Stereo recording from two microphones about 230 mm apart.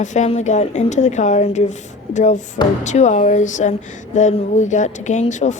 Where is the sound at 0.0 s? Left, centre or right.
Left.